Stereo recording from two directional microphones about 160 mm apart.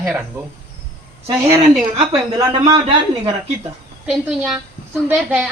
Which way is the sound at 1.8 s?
35° right (ahead or behind).